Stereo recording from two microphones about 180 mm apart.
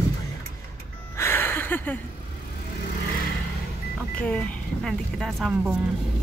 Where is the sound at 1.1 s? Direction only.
15° left (ahead or behind).